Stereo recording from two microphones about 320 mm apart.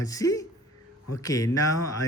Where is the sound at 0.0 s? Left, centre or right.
Centre.